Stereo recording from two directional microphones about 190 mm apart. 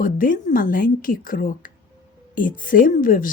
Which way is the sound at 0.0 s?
45° left (ahead or behind).